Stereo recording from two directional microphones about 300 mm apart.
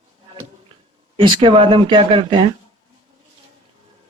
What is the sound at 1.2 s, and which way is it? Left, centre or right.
Speech, centre.